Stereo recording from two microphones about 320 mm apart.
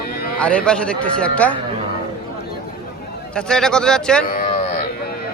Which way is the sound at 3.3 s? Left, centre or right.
Centre.